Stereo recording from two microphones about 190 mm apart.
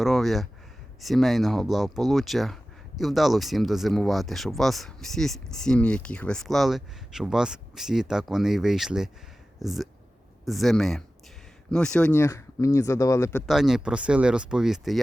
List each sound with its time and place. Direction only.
0.0 s speech: centre (ahead or behind); by 13.4 s 15° left (ahead or behind)
13.5 s speech: centre (ahead or behind)